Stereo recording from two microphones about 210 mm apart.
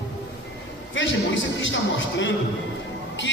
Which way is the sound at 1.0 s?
60° left (ahead or behind).